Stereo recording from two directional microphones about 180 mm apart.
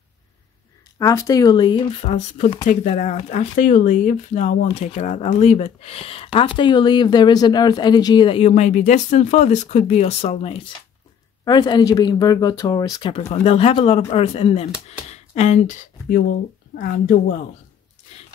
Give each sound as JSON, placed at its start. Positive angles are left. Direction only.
{"t": 0.9, "sound": "speech", "side_deg": 20}
{"t": 11.4, "sound": "speech", "side_deg": 25}
{"t": 13.3, "sound": "a woman's voice", "side_deg": 35}